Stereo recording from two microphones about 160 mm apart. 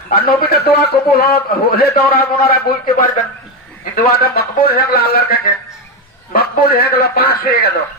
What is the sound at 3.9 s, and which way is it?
A man's voice, 70° left (ahead or behind).